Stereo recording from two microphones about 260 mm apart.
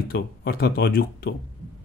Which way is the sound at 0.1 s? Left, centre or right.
Left.